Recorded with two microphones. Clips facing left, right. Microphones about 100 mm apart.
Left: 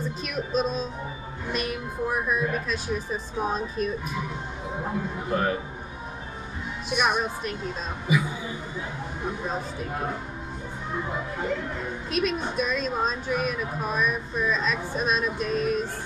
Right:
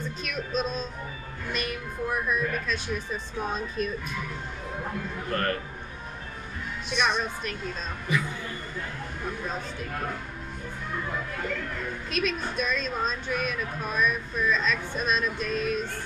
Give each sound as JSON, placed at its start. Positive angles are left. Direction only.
{"t": 0.0, "sound": "music", "side_deg": 5}
{"t": 1.5, "sound": "speech", "side_deg": 5}
{"t": 4.7, "sound": "a woman's voice", "side_deg": 15}
{"t": 6.9, "sound": "a woman's voice", "side_deg": 10}
{"t": 12.1, "sound": "speech", "side_deg": 5}